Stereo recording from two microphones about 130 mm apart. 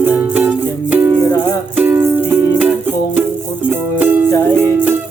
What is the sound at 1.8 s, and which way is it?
Music, 15° right (ahead or behind).